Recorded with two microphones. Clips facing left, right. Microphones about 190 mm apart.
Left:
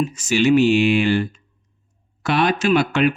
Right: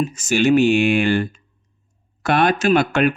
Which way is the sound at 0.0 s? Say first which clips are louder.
Even; 50° right (ahead or behind).